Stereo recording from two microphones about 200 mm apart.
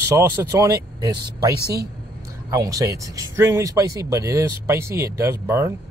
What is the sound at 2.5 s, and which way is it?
Speech, 15° right (ahead or behind).